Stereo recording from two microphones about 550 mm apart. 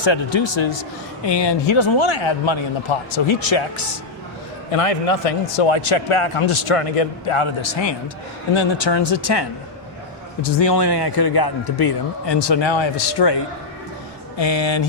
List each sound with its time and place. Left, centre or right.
0.0 s a man's voice: left
4.7 s a man's voice: left